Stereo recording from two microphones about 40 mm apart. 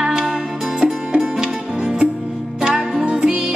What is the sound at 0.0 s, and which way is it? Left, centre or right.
Music, right.